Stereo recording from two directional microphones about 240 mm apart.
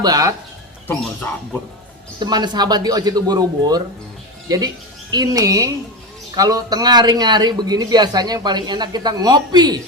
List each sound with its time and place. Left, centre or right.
0.0 s a man's voice: centre
2.1 s a man's voice: centre